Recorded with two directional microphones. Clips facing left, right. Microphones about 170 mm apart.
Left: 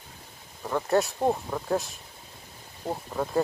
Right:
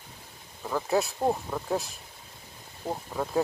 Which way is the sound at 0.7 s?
Centre (ahead or behind).